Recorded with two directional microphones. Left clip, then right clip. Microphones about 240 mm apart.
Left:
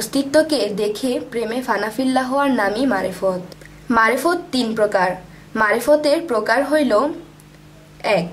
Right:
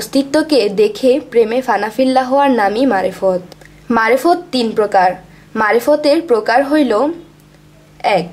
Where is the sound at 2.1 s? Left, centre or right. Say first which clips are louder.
Right 6 dB; right.